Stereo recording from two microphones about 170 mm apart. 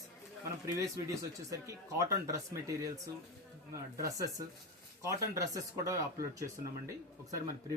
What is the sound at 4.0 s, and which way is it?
Speech, 20° right (ahead or behind).